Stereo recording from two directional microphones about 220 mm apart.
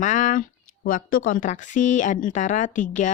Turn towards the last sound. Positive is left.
turn(degrees=35)  # may be behind; listen again after turning